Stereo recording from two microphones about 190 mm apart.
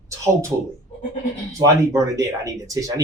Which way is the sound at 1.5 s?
15° right (ahead or behind).